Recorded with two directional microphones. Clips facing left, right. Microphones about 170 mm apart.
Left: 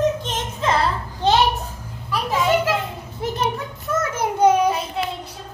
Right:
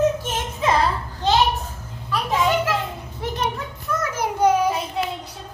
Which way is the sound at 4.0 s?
20° left (ahead or behind).